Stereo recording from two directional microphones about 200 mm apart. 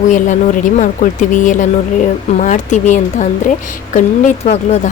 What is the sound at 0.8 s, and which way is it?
A woman's voice, 40° left (ahead or behind).